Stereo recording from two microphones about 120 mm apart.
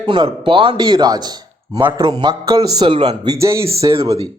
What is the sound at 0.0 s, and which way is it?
Speech, 40° right (ahead or behind).